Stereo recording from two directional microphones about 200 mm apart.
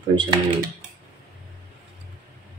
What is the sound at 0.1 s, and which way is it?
Speech, 25° right (ahead or behind).